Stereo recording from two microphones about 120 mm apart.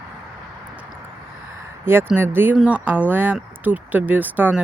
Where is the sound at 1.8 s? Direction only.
20° right (ahead or behind).